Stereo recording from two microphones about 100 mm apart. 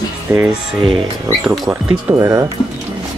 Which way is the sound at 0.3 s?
25° right (ahead or behind).